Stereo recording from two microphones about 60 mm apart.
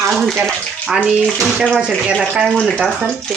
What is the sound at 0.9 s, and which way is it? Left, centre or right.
Speech, centre.